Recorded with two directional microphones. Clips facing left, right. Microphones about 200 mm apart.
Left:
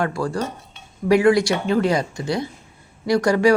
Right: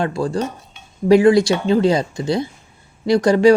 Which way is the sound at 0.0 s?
20° right (ahead or behind).